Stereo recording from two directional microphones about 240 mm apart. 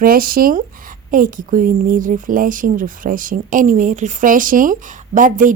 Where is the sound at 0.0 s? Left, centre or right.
Right.